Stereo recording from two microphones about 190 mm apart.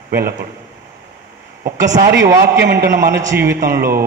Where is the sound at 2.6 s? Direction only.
60° right (ahead or behind).